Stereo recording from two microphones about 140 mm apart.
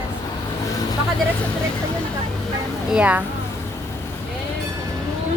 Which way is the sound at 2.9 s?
10° right (ahead or behind).